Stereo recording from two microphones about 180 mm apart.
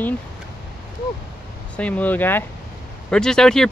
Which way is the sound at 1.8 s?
10° left (ahead or behind).